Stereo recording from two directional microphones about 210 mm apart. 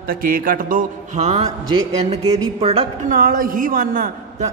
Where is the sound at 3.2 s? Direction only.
40° right (ahead or behind).